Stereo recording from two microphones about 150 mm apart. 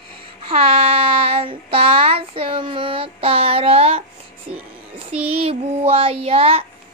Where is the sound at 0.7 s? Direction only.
40° right (ahead or behind).